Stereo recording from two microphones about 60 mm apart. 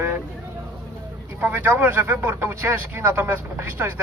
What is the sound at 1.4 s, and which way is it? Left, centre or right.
Speech, right.